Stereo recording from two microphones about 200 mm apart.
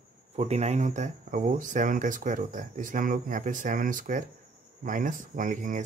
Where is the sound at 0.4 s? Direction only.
30° right (ahead or behind).